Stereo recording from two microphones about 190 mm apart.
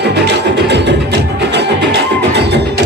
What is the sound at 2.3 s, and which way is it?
Music, 65° right (ahead or behind).